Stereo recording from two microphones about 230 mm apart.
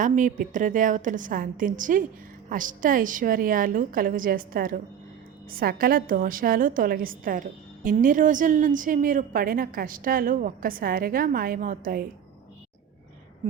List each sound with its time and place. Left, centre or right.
0.0 s a woman's voice: right